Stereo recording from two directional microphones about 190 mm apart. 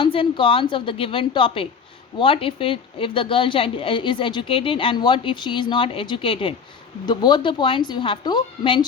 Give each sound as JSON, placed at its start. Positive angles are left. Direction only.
{"t": 0.0, "sound": "speech", "side_deg": 25}